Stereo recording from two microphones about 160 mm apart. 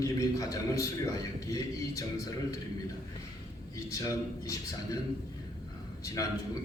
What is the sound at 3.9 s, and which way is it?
A man's voice, 20° left (ahead or behind).